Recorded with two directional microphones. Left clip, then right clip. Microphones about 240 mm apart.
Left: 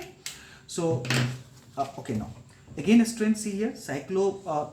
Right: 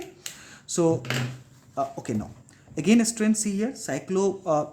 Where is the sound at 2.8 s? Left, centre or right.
Right.